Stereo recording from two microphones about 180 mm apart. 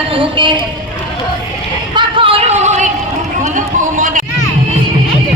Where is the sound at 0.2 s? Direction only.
25° right (ahead or behind).